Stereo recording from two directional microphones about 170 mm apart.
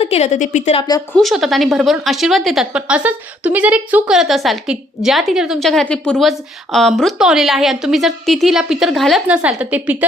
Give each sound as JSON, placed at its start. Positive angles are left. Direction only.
{"t": 0.0, "sound": "a woman's voice", "side_deg": 40}
{"t": 0.8, "sound": "a woman's voice", "side_deg": 25}
{"t": 1.1, "sound": "speech", "side_deg": 0}